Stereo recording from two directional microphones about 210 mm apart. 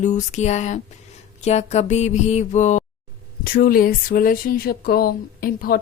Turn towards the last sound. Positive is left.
turn(degrees=45)  # may be behind; listen again after turning